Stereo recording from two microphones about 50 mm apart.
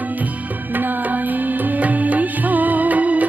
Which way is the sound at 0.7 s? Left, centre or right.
Right.